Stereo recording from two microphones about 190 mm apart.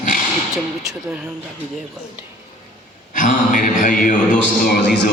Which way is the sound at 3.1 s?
45° left (ahead or behind).